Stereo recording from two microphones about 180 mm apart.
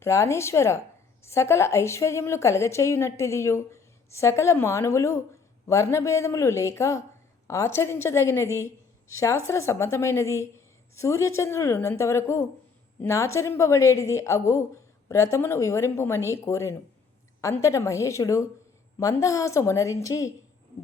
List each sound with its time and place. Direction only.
0.0 s a woman's voice: 15° left (ahead or behind)